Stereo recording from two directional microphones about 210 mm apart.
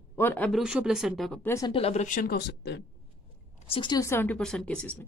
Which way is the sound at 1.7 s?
30° left (ahead or behind).